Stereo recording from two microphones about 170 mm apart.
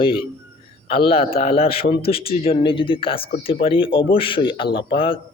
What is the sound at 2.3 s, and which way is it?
Speech, 35° left (ahead or behind).